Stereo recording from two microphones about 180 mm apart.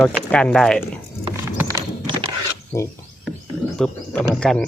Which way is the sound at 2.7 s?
15° left (ahead or behind).